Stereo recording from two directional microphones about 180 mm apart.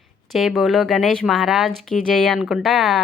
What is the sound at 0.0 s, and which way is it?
Speech, centre (ahead or behind).